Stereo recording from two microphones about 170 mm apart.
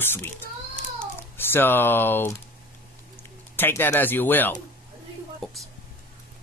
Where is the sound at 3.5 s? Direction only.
15° left (ahead or behind).